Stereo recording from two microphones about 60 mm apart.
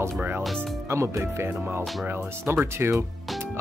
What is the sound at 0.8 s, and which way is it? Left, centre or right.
Speech, right.